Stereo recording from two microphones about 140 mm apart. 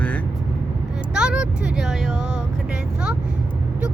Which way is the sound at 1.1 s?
5° right (ahead or behind).